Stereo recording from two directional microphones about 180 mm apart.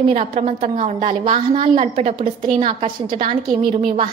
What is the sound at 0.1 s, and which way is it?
A woman's voice, 40° right (ahead or behind).